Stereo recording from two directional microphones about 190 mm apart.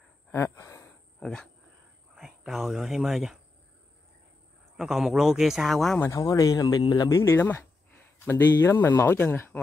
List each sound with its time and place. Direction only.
0.3 s a sound: 15° left (ahead or behind)
1.2 s speech: 5° left (ahead or behind)
4.7 s speech: centre (ahead or behind)
6.0 s speech: 20° left (ahead or behind)